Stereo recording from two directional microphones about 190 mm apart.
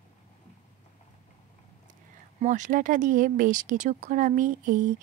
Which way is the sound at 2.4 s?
40° right (ahead or behind).